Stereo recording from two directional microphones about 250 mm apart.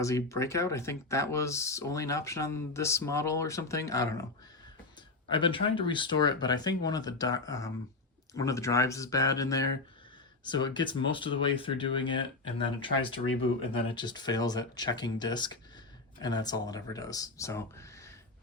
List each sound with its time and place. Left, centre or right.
0.0 s speech: centre
5.3 s speech: centre